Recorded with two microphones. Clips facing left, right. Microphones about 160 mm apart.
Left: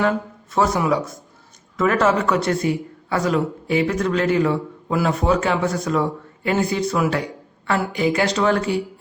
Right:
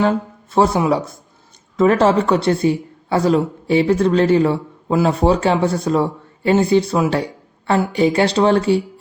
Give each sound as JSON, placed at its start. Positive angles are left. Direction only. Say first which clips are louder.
{"t": 0.0, "sound": "speech", "louder": "right 3 dB", "side_deg": -30}